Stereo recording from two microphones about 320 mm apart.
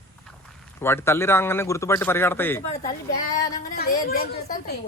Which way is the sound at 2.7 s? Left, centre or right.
Centre.